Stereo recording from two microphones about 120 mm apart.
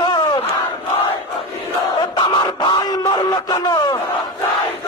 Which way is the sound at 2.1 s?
45° left (ahead or behind).